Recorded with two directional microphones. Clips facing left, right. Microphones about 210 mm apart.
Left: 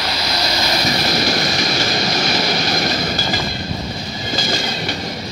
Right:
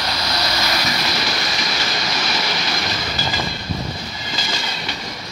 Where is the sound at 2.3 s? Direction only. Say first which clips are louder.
Left 5 dB; 45° left (ahead or behind).